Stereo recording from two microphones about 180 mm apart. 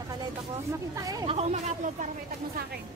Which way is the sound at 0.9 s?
20° right (ahead or behind).